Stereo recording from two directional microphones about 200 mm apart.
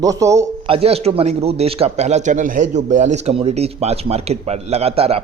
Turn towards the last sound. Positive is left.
turn(degrees=-30)  # may be behind; listen again after turning